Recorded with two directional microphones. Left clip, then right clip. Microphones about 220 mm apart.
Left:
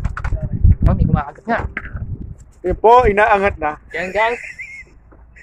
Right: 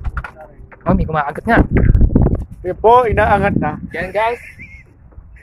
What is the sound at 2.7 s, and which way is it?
Speech, 5° left (ahead or behind).